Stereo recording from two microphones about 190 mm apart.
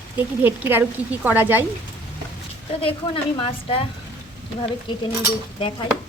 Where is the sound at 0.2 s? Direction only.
10° right (ahead or behind).